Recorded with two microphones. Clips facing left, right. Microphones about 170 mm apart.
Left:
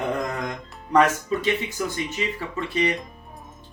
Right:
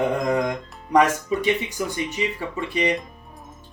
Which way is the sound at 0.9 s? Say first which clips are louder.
Right 1 dB; 15° right (ahead or behind).